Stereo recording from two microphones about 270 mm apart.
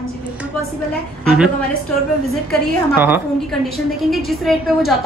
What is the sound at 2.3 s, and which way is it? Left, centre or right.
A woman's voice, centre.